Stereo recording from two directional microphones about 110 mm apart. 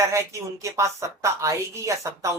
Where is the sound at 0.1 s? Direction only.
25° right (ahead or behind).